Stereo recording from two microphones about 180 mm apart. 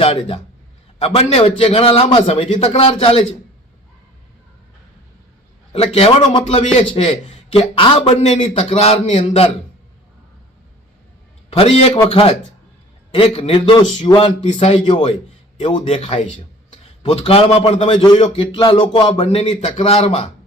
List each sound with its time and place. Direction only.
0.0 s a man's voice: 30° left (ahead or behind)
5.7 s a man's voice: 35° left (ahead or behind)
11.5 s a man's voice: 35° left (ahead or behind)